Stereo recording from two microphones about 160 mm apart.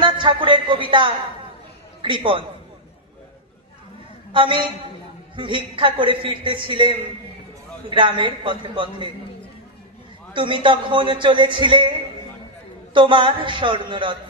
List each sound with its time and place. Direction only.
0.0 s a man's voice: 30° right (ahead or behind)
4.3 s a woman's voice: 30° right (ahead or behind)
10.3 s a woman's voice: 30° right (ahead or behind)
12.9 s a woman's voice: 30° right (ahead or behind)